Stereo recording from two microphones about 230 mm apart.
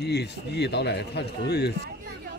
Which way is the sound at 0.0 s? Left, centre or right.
Left.